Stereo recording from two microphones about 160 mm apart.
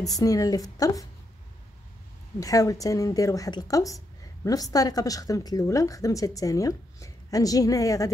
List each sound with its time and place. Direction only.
0.2 s speech: 20° left (ahead or behind)
2.4 s speech: 20° left (ahead or behind)